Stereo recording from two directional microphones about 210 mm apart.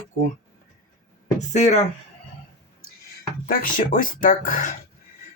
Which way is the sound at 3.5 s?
40° left (ahead or behind).